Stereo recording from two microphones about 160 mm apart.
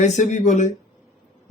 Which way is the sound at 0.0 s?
50° left (ahead or behind).